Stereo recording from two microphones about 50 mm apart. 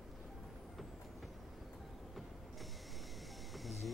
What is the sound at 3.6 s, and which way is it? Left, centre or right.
Livestock, centre.